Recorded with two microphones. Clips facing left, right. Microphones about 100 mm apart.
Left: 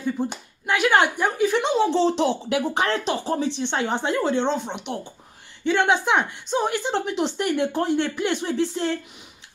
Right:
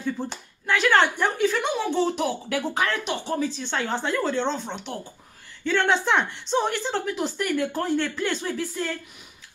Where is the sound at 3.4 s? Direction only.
20° left (ahead or behind).